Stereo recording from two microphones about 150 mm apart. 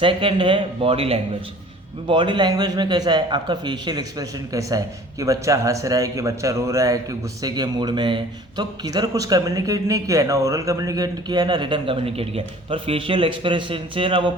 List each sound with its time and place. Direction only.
0.0 s a man's voice: 35° right (ahead or behind)